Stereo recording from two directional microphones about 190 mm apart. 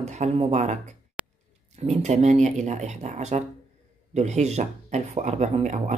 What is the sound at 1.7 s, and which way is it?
Speech, 35° right (ahead or behind).